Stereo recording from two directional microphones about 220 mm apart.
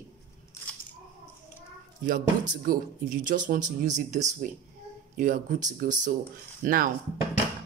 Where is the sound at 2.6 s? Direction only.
40° right (ahead or behind).